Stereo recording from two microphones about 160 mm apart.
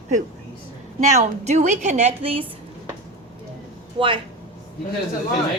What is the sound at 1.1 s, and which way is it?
A woman's voice, 45° right (ahead or behind).